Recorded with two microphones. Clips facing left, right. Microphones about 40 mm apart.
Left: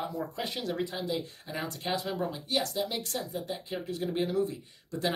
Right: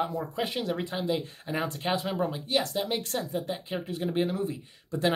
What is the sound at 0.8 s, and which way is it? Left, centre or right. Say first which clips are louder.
Speech: right 4 dB; right.